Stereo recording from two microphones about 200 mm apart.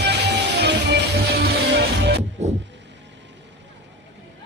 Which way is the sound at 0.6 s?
55° right (ahead or behind).